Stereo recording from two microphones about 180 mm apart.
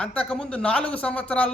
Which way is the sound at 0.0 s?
5° left (ahead or behind).